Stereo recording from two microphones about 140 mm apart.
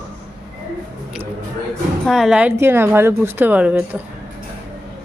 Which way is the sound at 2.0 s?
Centre (ahead or behind).